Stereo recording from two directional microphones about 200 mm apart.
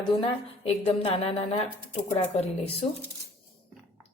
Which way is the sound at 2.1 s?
30° left (ahead or behind).